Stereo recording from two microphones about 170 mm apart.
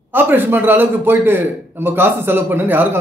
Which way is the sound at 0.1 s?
10° right (ahead or behind).